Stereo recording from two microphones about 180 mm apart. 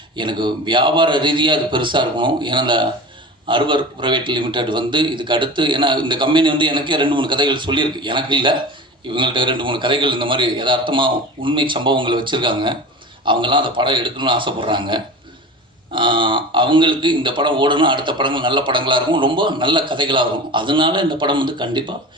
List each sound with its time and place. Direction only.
0.2 s speech: 25° right (ahead or behind)